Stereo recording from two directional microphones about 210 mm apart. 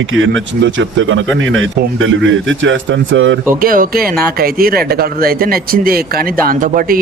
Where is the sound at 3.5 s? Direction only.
40° right (ahead or behind).